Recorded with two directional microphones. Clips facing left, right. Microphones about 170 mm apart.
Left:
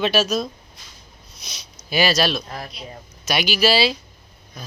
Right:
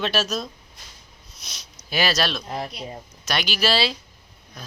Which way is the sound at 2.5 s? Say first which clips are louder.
Right 3 dB; 20° right (ahead or behind).